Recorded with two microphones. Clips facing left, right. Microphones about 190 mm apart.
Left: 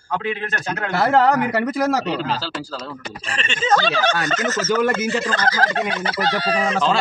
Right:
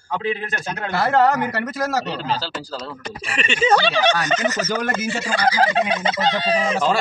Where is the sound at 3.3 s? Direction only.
10° right (ahead or behind).